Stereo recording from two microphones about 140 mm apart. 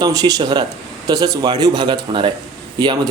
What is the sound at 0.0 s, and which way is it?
A man's voice, 25° right (ahead or behind).